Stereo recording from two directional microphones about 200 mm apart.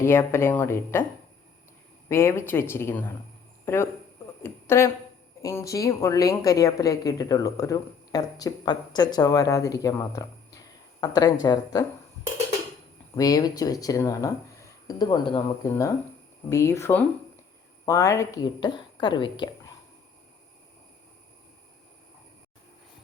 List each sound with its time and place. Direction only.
0.0 s speech: 10° left (ahead or behind)
2.0 s speech: 15° left (ahead or behind)
4.4 s a woman's voice: 10° left (ahead or behind)
13.1 s a woman's voice: 20° left (ahead or behind)